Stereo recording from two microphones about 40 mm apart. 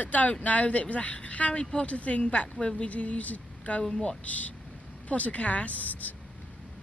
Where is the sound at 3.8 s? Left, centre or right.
Centre.